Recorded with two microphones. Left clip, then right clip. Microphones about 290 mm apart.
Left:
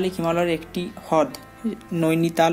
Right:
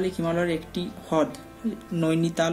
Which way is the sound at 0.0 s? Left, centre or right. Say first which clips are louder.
Left 4 dB; centre.